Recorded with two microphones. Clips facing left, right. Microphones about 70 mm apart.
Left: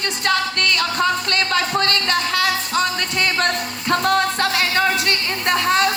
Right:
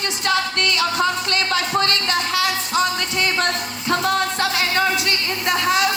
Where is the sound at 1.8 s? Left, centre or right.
Left.